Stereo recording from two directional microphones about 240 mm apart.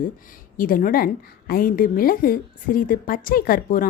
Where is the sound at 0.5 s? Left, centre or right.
Left.